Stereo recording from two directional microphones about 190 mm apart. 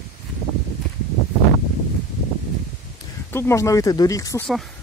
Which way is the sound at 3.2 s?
15° left (ahead or behind).